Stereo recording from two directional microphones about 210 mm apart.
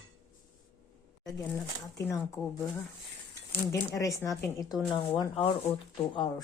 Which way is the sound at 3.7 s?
15° left (ahead or behind).